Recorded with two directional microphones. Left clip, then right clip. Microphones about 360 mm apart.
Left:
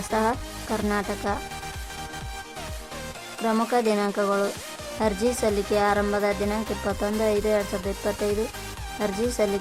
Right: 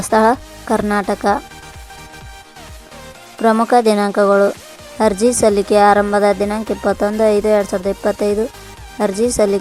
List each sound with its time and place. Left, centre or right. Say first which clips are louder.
0.0 s speech: right 12 dB; centre
3.4 s speech: right 11 dB; centre